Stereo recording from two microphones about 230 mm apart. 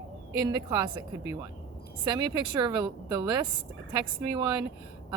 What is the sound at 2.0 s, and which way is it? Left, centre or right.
A woman's voice, centre.